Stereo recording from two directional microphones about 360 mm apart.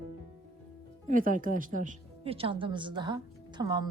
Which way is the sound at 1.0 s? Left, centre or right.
Right.